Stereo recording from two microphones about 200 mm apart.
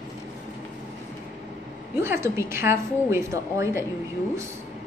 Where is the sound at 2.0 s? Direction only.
15° right (ahead or behind).